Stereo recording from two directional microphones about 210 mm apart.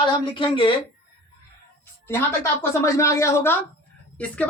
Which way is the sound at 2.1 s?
10° left (ahead or behind).